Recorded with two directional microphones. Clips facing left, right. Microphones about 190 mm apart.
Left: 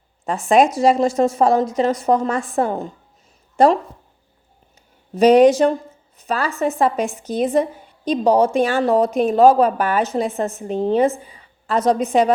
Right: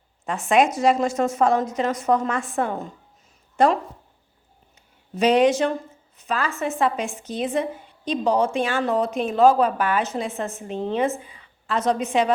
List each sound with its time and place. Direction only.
0.3 s a woman's voice: 35° left (ahead or behind)
5.1 s a woman's voice: 40° left (ahead or behind)